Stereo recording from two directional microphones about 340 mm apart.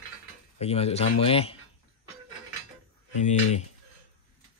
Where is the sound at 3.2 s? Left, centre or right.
Centre.